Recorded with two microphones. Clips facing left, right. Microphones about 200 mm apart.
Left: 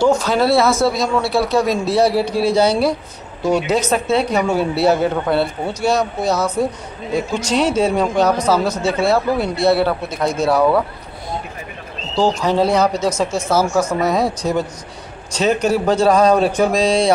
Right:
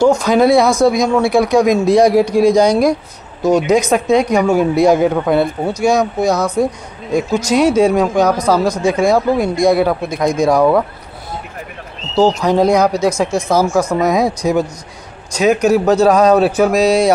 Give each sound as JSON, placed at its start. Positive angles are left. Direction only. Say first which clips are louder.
{"t": 0.2, "sound": "speech", "louder": "right 4 dB", "side_deg": -15}
{"t": 12.4, "sound": "speech", "louder": "right 3 dB", "side_deg": -10}